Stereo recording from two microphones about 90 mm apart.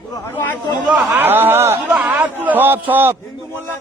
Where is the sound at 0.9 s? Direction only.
20° right (ahead or behind).